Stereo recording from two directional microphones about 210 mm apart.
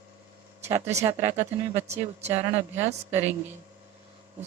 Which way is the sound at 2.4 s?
30° right (ahead or behind).